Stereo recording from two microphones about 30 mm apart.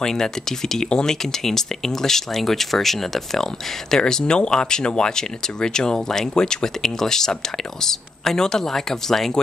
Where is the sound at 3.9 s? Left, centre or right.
Left.